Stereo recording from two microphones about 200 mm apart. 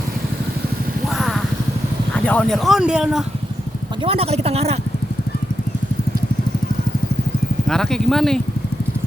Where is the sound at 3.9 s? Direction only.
30° right (ahead or behind).